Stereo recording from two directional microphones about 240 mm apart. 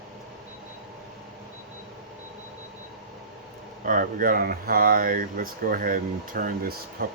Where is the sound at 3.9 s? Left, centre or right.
Right.